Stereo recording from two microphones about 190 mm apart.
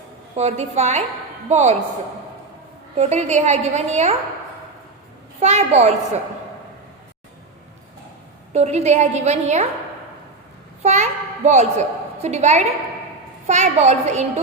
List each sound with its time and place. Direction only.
0.3 s a woman's voice: 35° right (ahead or behind)
3.0 s a woman's voice: 35° right (ahead or behind)
5.4 s a woman's voice: 35° right (ahead or behind)
8.5 s a woman's voice: 35° right (ahead or behind)
10.8 s a child's voice: 35° right (ahead or behind)